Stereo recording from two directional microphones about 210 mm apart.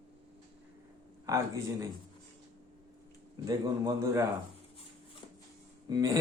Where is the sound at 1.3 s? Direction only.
15° right (ahead or behind).